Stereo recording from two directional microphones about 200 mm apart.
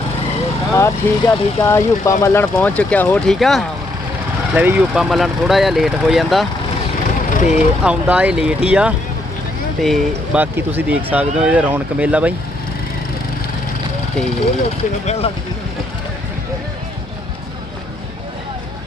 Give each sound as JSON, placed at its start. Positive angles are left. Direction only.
{"t": 0.7, "sound": "speech", "side_deg": 15}
{"t": 4.5, "sound": "speech", "side_deg": -10}
{"t": 7.3, "sound": "vehicle", "side_deg": 40}
{"t": 7.9, "sound": "speech", "side_deg": -5}
{"t": 15.0, "sound": "speech", "side_deg": 30}